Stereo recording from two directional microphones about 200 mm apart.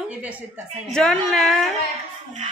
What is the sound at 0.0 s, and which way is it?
A woman's voice, 5° right (ahead or behind).